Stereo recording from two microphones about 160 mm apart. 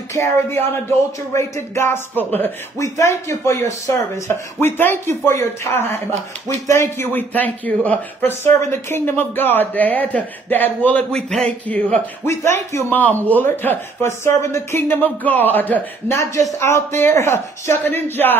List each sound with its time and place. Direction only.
0.1 s a man's voice: 15° left (ahead or behind)
4.6 s speech: 15° left (ahead or behind)